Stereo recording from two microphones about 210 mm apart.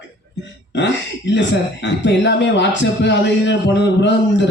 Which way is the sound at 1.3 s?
60° left (ahead or behind).